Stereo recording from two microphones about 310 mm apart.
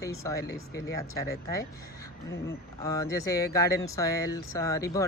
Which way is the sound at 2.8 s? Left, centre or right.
Centre.